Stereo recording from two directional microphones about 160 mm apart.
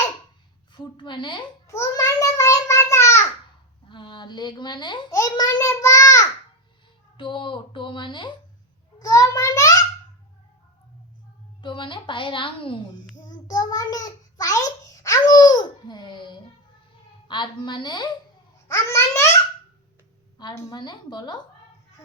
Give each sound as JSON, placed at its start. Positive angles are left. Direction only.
{"t": 0.8, "sound": "a woman's voice", "side_deg": 30}
{"t": 1.7, "sound": "a child's voice", "side_deg": 20}
{"t": 3.8, "sound": "a child's voice", "side_deg": 30}
{"t": 7.2, "sound": "a woman's voice", "side_deg": 30}
{"t": 11.6, "sound": "a woman's voice", "side_deg": 30}
{"t": 13.2, "sound": "a sound", "side_deg": 25}
{"t": 17.2, "sound": "a woman's voice", "side_deg": 30}
{"t": 18.7, "sound": "a child's voice", "side_deg": 15}
{"t": 20.4, "sound": "a woman's voice", "side_deg": 25}